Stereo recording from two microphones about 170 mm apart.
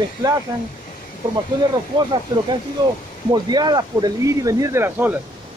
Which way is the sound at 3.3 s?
25° right (ahead or behind).